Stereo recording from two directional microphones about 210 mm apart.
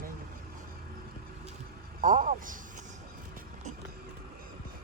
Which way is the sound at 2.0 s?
40° right (ahead or behind).